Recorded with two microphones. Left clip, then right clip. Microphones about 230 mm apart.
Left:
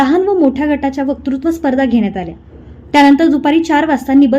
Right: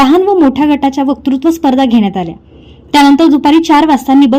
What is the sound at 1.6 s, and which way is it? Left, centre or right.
Speech, right.